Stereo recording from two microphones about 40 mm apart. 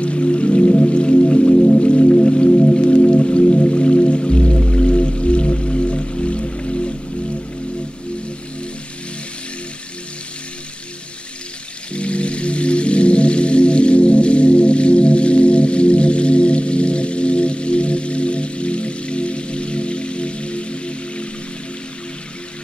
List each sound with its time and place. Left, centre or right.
0.0 s music: left
11.9 s music: left